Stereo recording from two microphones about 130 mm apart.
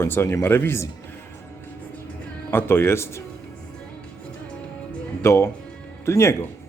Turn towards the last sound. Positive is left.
turn(degrees=20)  # may be behind; listen again after turning